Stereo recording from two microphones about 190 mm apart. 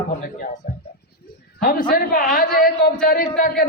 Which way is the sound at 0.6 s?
50° left (ahead or behind).